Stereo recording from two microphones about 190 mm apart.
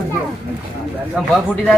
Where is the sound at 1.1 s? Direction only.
Centre (ahead or behind).